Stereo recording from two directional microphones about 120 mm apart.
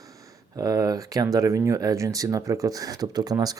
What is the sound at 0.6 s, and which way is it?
Speech, 30° right (ahead or behind).